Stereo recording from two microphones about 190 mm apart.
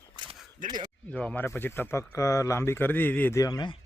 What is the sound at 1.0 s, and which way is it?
Speech, 5° left (ahead or behind).